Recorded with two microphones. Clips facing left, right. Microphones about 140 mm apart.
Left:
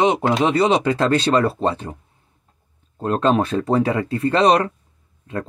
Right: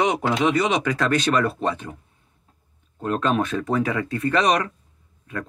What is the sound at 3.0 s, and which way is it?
Speech, 30° left (ahead or behind).